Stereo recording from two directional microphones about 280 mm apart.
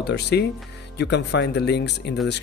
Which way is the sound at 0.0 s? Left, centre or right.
Left.